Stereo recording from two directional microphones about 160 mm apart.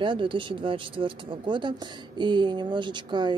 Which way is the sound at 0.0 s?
30° right (ahead or behind).